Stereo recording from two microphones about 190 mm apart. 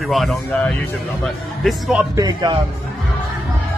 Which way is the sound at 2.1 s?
20° right (ahead or behind).